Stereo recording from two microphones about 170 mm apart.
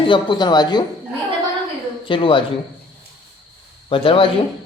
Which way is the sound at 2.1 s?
30° left (ahead or behind).